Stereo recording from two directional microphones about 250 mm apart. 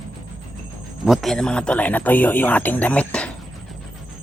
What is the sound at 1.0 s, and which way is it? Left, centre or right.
A man's voice, centre.